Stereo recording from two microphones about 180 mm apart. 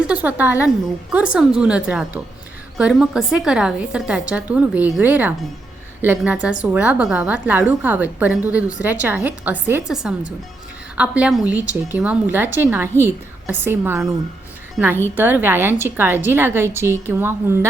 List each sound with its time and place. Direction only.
0.0 s a woman's voice: 5° right (ahead or behind)
15.1 s a woman's voice: 10° right (ahead or behind)